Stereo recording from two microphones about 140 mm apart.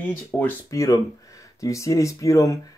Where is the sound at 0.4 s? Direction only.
20° left (ahead or behind).